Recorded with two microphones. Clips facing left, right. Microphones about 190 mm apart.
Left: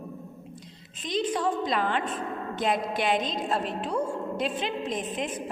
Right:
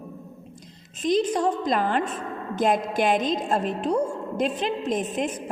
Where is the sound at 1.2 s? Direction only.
40° right (ahead or behind).